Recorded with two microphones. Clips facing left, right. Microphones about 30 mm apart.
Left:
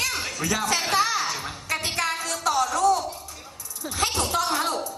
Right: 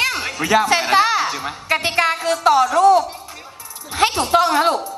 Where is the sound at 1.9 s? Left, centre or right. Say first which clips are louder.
Right 10 dB; right.